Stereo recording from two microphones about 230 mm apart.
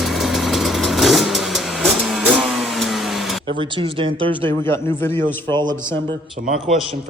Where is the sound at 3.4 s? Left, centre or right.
Right.